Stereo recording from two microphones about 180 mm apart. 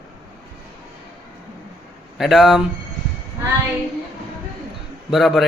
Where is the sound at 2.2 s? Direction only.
Centre (ahead or behind).